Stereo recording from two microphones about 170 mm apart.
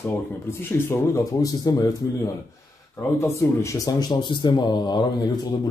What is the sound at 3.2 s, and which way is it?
Speech, 15° left (ahead or behind).